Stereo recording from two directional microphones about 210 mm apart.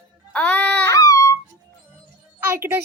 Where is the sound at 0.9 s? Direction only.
15° left (ahead or behind).